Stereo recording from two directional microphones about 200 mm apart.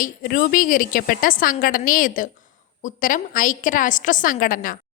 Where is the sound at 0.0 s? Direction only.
45° left (ahead or behind).